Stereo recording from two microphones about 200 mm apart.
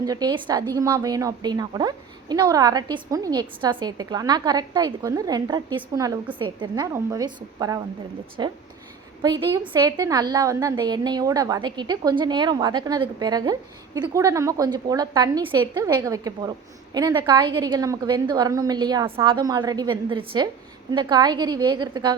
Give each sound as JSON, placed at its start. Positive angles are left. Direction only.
{"t": 0.0, "sound": "a woman's voice", "side_deg": -20}